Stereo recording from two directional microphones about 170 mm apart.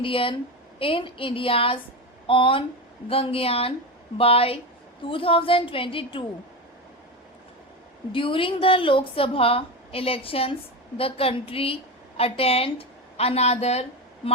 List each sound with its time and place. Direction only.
0.0 s a woman's voice: 30° left (ahead or behind)
8.1 s a woman's voice: 30° left (ahead or behind)